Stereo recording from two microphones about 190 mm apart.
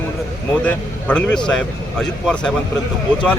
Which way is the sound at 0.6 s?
10° left (ahead or behind).